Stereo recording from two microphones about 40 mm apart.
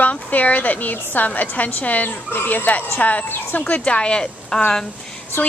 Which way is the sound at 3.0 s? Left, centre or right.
Left.